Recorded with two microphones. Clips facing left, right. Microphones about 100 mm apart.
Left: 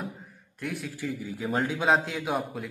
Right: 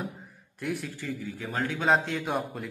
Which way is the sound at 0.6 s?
Centre (ahead or behind).